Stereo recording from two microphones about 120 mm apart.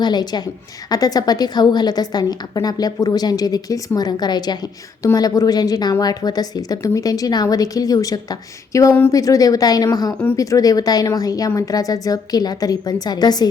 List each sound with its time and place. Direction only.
0.0 s a woman's voice: 35° left (ahead or behind)